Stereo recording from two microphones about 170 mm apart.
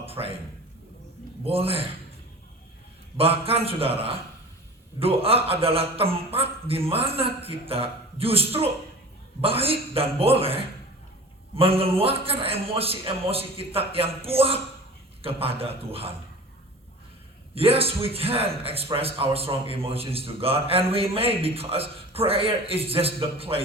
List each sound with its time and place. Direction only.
0.0 s a sound: 35° right (ahead or behind)
1.5 s a man's voice: 35° right (ahead or behind)
3.2 s a man's voice: 35° right (ahead or behind)
17.5 s a man's voice: 35° right (ahead or behind)